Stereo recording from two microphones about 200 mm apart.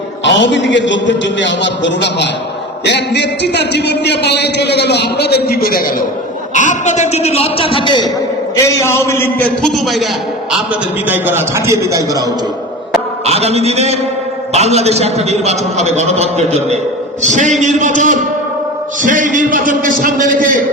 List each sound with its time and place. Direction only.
0.3 s a man's voice: 65° left (ahead or behind); by 5.8 s 50° left (ahead or behind)
6.5 s a man's voice: 40° left (ahead or behind)
8.5 s a man's voice: 15° left (ahead or behind)
11.1 s a man's voice: 10° right (ahead or behind)
13.2 s a man's voice: 30° right (ahead or behind)